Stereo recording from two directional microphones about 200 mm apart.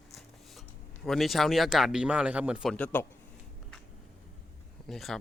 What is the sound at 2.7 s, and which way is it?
Speech, 10° left (ahead or behind).